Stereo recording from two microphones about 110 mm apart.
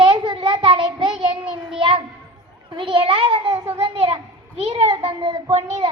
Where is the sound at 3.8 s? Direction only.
60° right (ahead or behind).